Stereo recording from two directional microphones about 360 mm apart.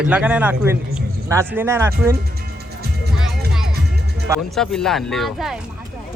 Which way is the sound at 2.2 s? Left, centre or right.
Right.